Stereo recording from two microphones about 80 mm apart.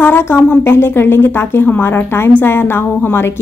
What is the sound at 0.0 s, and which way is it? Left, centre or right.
A woman's voice, left.